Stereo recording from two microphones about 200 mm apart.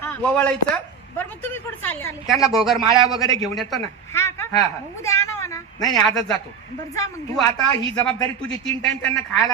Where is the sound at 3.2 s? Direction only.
15° left (ahead or behind).